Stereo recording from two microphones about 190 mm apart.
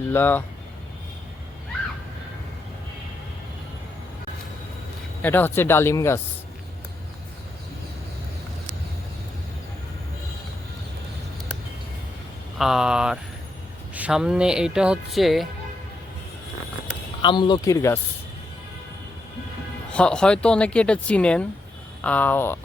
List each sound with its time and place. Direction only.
0.1 s speech: 10° left (ahead or behind)
5.2 s speech: 10° left (ahead or behind)
12.5 s speech: centre (ahead or behind)
17.2 s speech: 25° left (ahead or behind)
19.9 s speech: 5° left (ahead or behind)